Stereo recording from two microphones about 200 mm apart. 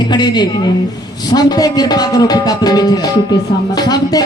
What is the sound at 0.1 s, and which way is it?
Speech, 20° left (ahead or behind).